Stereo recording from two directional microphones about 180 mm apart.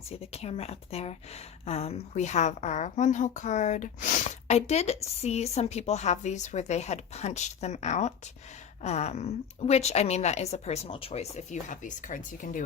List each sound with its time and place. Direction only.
0.1 s a woman's voice: 35° left (ahead or behind)